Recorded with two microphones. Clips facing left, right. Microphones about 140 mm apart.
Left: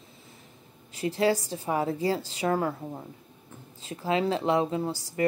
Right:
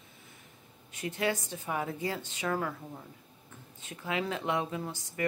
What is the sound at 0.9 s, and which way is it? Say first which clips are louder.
Speech: left 7 dB; 35° left (ahead or behind).